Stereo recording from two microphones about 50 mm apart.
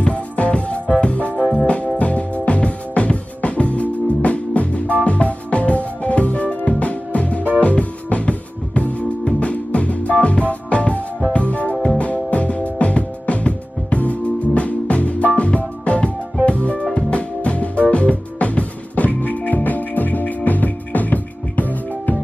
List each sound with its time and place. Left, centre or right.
0.0 s music: left